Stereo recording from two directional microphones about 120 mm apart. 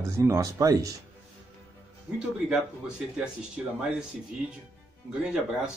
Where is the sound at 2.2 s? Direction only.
5° right (ahead or behind).